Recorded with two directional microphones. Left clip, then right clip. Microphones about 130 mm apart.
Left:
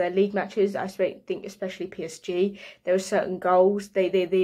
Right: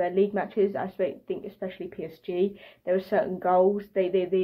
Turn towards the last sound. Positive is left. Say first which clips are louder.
# left 2 dB
turn(degrees=25)  # may be behind; listen again after turning